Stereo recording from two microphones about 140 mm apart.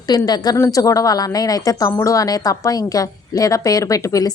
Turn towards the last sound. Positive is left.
turn(degrees=25)  # may be behind; listen again after turning